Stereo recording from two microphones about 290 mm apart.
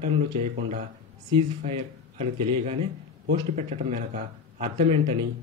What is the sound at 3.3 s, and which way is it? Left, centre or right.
Speech, right.